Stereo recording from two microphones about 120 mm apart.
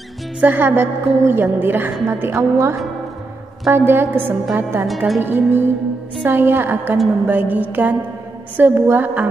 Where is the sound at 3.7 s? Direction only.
20° right (ahead or behind).